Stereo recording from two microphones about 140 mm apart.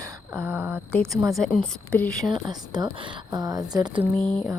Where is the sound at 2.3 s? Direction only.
30° right (ahead or behind).